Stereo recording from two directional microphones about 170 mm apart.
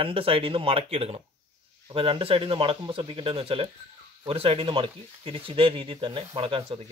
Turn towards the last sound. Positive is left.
turn(degrees=-35)  # may be behind; listen again after turning